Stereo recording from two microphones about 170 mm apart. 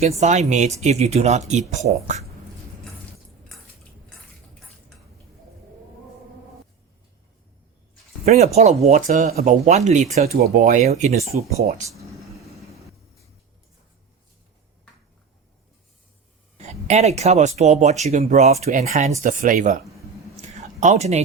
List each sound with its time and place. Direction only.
0.2 s speech: 45° right (ahead or behind)
8.2 s speech: 40° right (ahead or behind)
16.6 s speech: 40° right (ahead or behind)
19.2 s speech: 50° right (ahead or behind)
20.3 s a sound: 45° right (ahead or behind)